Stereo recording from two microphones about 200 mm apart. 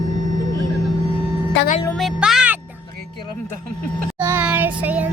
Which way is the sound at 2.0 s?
Centre (ahead or behind).